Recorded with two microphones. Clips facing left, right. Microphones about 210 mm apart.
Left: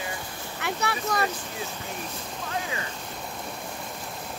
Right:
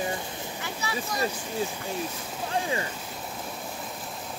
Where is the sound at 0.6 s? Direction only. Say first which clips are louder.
Left 6 dB; 65° left (ahead or behind).